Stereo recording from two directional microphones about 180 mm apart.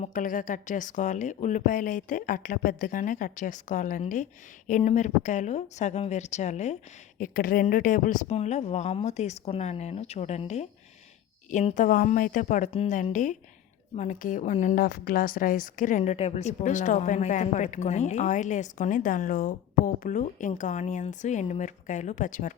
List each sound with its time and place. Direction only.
0.0 s speech: 50° left (ahead or behind)
7.2 s speech: 50° left (ahead or behind)